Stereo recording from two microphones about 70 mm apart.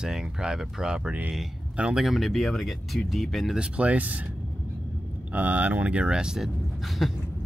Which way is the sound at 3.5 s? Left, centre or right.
Centre.